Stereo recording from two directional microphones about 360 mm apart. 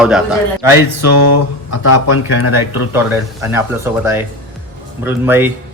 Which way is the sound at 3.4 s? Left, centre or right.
Centre.